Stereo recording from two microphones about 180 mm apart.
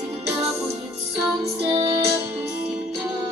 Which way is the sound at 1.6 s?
30° right (ahead or behind).